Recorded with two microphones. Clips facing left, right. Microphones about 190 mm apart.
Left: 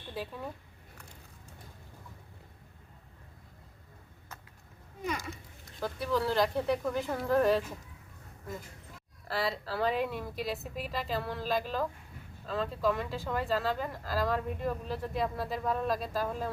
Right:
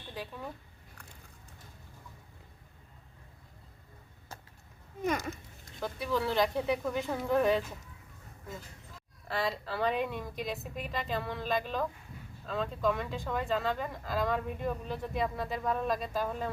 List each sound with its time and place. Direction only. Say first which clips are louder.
0.1 s speech: left 2 dB; 5° left (ahead or behind)
5.0 s speech: right 4 dB; 45° right (ahead or behind)
5.8 s speech: left 1 dB; centre (ahead or behind)
9.2 s speech: even; centre (ahead or behind)